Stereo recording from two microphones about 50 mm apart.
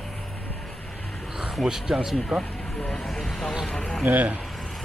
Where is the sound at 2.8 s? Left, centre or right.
Centre.